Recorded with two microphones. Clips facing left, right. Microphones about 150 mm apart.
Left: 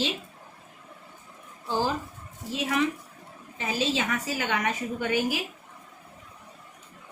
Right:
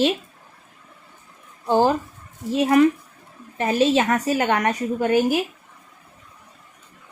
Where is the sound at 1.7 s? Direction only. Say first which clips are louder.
Right 9 dB; 60° right (ahead or behind).